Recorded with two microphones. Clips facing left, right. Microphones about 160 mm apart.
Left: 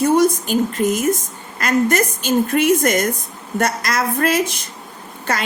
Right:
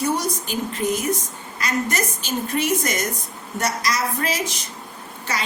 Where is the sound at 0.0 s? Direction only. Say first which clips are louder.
Left 9 dB; 50° left (ahead or behind).